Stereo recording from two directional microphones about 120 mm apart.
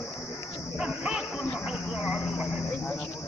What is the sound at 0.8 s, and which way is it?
Speech, 10° right (ahead or behind).